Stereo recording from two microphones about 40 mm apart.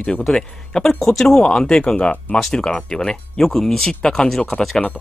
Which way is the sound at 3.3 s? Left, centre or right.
Centre.